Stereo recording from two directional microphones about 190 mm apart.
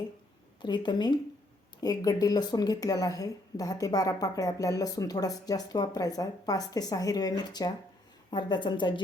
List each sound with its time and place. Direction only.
0.6 s speech: 25° left (ahead or behind)